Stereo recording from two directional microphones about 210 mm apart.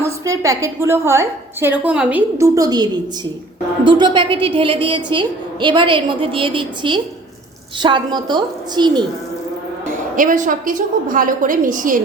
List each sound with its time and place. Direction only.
0.0 s a woman's voice: 15° right (ahead or behind)
10.2 s a woman's voice: 40° right (ahead or behind)